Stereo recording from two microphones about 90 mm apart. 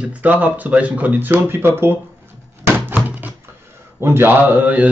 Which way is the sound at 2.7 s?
20° right (ahead or behind).